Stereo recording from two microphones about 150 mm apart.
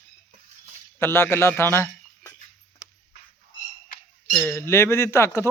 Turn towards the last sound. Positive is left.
turn(degrees=15)  # may be behind; listen again after turning